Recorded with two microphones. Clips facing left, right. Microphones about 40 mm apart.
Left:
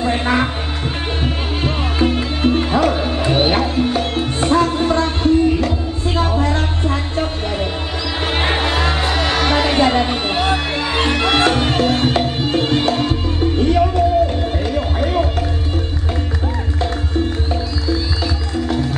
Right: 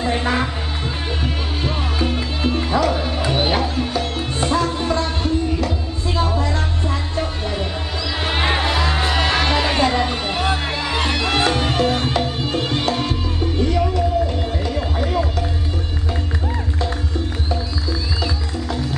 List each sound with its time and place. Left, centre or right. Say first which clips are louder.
0.0 s music: left 3 dB; left
14.7 s run: left 3 dB; left